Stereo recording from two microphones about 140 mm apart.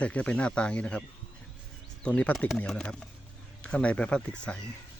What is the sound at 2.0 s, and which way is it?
Speech, 10° left (ahead or behind).